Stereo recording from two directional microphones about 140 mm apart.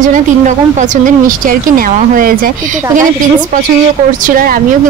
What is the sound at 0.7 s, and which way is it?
Speech, 65° right (ahead or behind).